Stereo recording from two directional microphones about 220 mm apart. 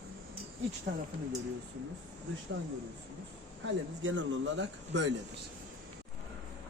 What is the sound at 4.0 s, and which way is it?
A man's voice, 60° right (ahead or behind).